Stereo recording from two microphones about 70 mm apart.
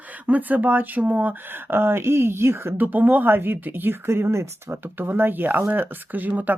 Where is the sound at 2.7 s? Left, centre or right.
Right.